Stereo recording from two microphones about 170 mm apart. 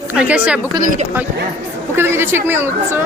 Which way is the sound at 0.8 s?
50° right (ahead or behind).